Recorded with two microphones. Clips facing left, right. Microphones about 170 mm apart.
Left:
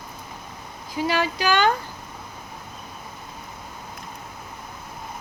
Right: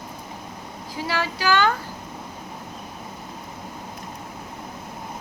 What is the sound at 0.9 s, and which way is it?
Speech, 15° left (ahead or behind).